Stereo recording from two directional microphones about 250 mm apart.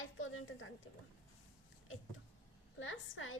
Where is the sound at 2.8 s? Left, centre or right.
Left.